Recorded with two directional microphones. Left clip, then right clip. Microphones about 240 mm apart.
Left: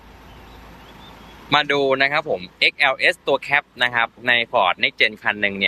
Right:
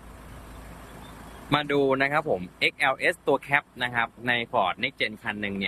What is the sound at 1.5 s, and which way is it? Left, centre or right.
Speech, centre.